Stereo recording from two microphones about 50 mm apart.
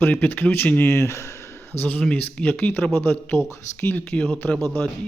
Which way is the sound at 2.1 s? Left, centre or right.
Left.